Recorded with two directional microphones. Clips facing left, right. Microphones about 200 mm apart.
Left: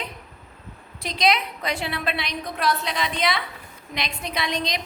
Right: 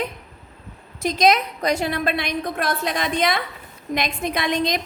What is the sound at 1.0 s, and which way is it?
A woman's voice, 45° right (ahead or behind).